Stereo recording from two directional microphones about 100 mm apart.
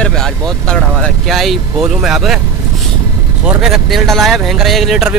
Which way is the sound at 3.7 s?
Centre (ahead or behind).